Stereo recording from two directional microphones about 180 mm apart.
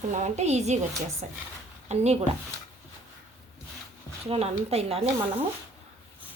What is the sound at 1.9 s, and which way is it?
Speech, 40° right (ahead or behind).